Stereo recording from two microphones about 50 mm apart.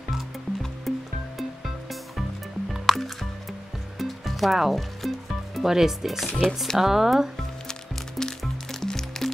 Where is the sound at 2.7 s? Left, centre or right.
Centre.